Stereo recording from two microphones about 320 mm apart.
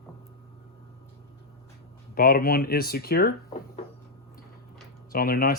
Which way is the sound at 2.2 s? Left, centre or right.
Left.